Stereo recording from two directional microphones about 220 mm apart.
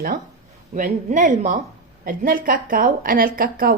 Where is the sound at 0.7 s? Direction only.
35° right (ahead or behind).